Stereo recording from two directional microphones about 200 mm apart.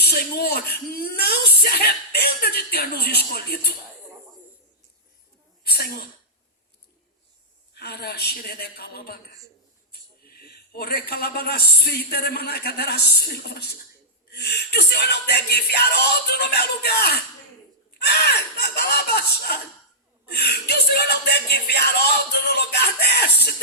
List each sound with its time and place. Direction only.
0.0 s speech: 55° left (ahead or behind)
5.6 s speech: 50° left (ahead or behind)
7.7 s speech: 55° left (ahead or behind)
10.2 s speech: 50° left (ahead or behind)
14.3 s music: 55° left (ahead or behind)
18.0 s speech: 55° left (ahead or behind)